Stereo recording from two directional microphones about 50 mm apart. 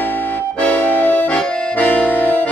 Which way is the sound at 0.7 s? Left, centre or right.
Left.